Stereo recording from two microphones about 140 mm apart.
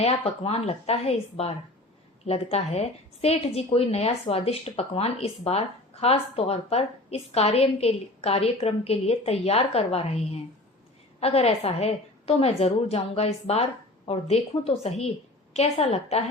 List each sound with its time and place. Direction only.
0.0 s a woman's voice: 45° left (ahead or behind)